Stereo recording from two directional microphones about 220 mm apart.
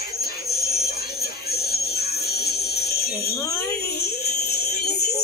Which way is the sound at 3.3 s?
15° left (ahead or behind).